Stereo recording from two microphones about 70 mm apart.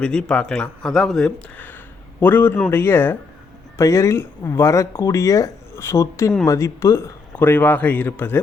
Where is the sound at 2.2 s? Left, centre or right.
Left.